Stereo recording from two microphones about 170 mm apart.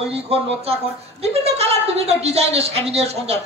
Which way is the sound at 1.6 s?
40° right (ahead or behind).